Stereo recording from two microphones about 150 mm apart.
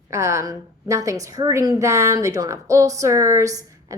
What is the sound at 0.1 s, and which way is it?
A woman's voice, 20° right (ahead or behind).